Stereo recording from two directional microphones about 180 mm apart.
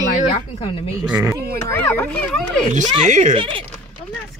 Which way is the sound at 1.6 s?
15° left (ahead or behind).